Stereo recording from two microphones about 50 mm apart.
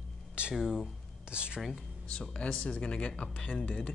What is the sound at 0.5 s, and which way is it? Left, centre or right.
Speech, centre.